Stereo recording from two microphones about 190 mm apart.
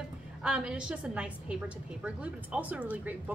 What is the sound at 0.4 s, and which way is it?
A woman's voice, 5° right (ahead or behind).